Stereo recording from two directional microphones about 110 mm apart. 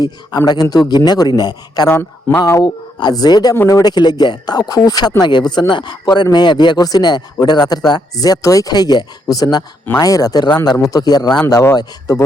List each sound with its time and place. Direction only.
0.4 s speech: 35° left (ahead or behind)
3.5 s speech: 25° left (ahead or behind)